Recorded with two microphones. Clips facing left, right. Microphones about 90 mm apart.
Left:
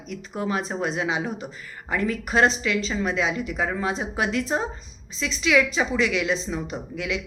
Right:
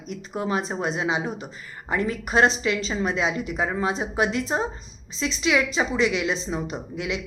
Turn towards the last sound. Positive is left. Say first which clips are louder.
# even
turn(degrees=-25)  # may be behind; listen again after turning